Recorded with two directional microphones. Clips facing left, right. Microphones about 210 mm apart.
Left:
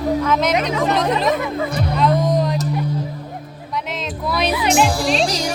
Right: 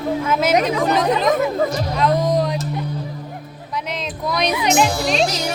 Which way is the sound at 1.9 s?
Centre (ahead or behind).